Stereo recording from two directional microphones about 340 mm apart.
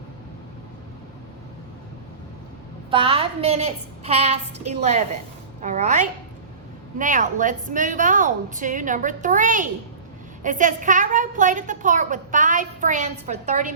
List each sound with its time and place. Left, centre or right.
2.9 s a woman's voice: centre